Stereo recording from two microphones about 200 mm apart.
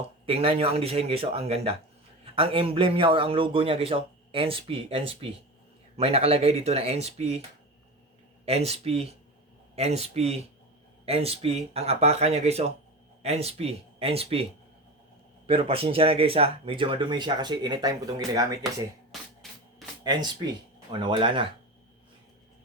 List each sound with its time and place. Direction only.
0.3 s a man's voice: 30° right (ahead or behind)
8.4 s a man's voice: 30° right (ahead or behind)
15.4 s a man's voice: 30° right (ahead or behind)
20.1 s a man's voice: 20° right (ahead or behind)